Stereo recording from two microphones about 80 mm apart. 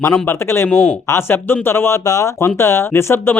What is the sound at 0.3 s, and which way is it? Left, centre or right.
Speech, left.